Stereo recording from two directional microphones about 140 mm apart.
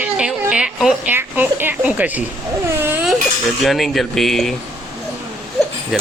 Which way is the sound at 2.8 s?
15° right (ahead or behind).